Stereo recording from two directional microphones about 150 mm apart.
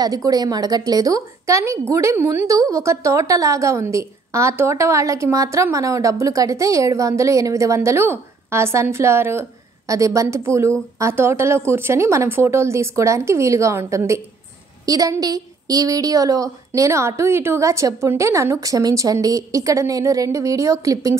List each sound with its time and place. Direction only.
0.0 s a woman's voice: 25° right (ahead or behind)